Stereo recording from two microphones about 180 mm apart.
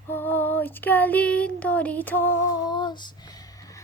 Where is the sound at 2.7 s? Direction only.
25° left (ahead or behind).